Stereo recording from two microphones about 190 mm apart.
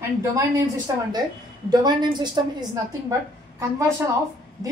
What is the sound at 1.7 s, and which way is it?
A woman's voice, 20° right (ahead or behind).